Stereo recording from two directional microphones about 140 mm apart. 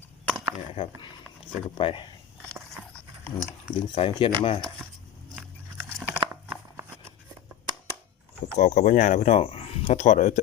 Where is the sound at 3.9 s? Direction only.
45° left (ahead or behind).